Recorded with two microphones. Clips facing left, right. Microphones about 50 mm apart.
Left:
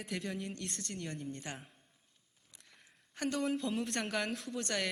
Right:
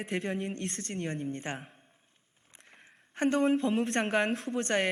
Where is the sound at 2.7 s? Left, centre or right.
Right.